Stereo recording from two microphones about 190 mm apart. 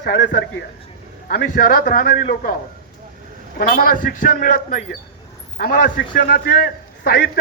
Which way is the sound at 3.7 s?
50° left (ahead or behind).